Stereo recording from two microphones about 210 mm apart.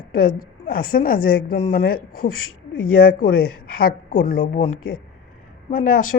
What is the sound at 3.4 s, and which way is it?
Speech, 45° left (ahead or behind).